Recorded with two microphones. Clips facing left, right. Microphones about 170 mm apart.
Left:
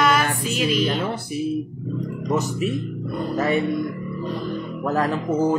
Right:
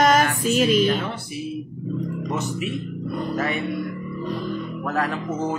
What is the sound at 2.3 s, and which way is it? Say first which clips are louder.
Speech: left 7 dB; 40° left (ahead or behind).